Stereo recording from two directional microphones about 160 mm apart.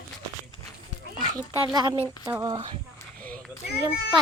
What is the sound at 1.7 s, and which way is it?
Speech, 25° right (ahead or behind).